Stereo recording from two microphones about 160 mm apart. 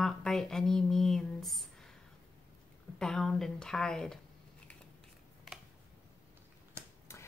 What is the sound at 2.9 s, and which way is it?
Speech, 5° left (ahead or behind).